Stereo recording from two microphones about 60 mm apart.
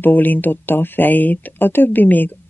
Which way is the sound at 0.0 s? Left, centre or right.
Left.